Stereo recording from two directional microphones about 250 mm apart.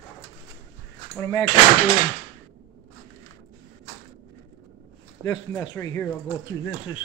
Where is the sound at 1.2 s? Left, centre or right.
Centre.